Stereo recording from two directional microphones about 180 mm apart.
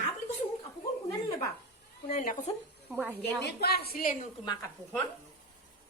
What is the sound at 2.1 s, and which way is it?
Speech, 45° left (ahead or behind).